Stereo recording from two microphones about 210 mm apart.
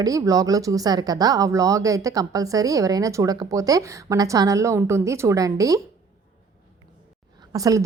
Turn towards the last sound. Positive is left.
turn(degrees=-15)  # may be behind; listen again after turning